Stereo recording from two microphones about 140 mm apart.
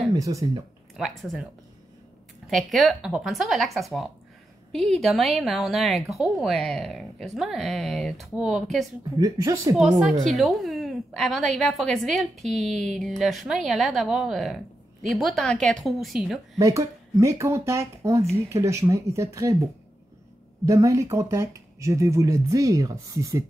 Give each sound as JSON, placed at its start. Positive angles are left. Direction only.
{"t": 0.1, "sound": "speech", "side_deg": -25}
{"t": 0.9, "sound": "a woman's voice", "side_deg": 0}
{"t": 2.5, "sound": "a woman's voice", "side_deg": 0}
{"t": 9.1, "sound": "speech", "side_deg": -25}
{"t": 10.2, "sound": "a woman's voice", "side_deg": 0}
{"t": 16.5, "sound": "speech", "side_deg": -20}
{"t": 20.6, "sound": "speech", "side_deg": -25}